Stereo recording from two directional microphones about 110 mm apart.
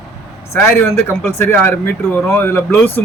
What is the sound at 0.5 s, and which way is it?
Speech, 25° left (ahead or behind).